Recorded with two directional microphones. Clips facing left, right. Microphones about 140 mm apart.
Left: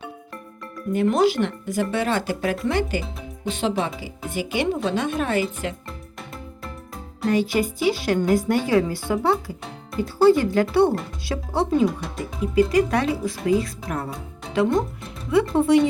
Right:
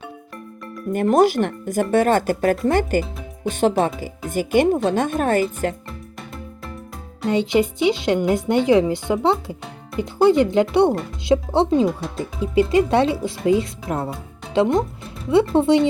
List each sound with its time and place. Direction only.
0.9 s speech: 45° right (ahead or behind)
7.3 s a woman's voice: 20° right (ahead or behind)
11.9 s speech: centre (ahead or behind)
12.2 s a woman's voice: 30° right (ahead or behind)